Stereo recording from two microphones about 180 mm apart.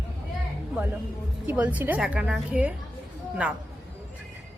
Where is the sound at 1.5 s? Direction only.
10° right (ahead or behind).